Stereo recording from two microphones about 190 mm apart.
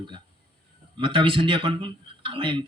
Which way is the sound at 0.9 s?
25° right (ahead or behind).